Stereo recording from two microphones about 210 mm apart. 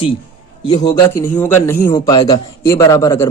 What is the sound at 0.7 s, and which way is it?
Speech, 25° left (ahead or behind).